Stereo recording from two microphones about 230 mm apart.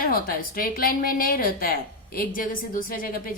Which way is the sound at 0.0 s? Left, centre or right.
Left.